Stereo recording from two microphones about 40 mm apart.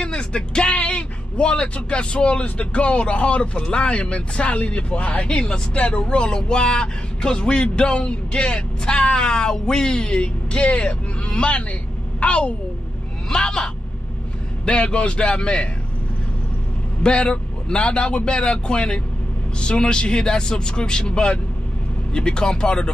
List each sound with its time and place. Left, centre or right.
0.0 s a man's voice: left
5.3 s a man's voice: left
13.3 s a man's voice: centre
17.0 s a man's voice: left